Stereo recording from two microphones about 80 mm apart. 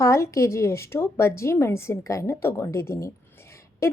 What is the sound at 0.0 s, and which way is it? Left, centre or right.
A woman's voice, left.